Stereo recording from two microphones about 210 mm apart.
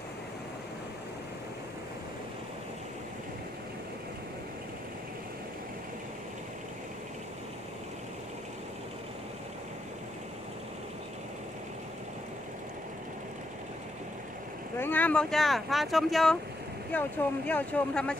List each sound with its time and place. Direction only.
14.8 s speech: 10° left (ahead or behind)